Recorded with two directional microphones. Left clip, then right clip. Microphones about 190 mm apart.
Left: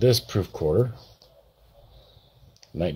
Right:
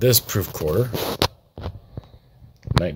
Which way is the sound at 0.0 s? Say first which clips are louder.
Right 2 dB; 5° right (ahead or behind).